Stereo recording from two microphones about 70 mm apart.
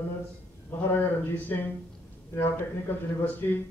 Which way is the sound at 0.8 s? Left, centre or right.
Left.